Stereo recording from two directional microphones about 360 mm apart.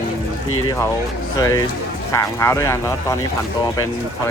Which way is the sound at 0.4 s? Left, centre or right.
Left.